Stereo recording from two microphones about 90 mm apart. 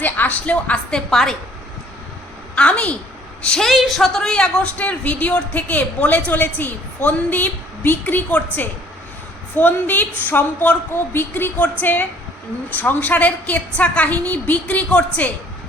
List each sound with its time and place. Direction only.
0.0 s speech: 20° left (ahead or behind)
2.6 s a woman's voice: 15° left (ahead or behind)